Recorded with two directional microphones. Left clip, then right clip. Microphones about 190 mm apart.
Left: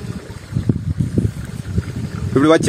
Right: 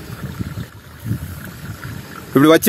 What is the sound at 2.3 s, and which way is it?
Speech, 45° right (ahead or behind).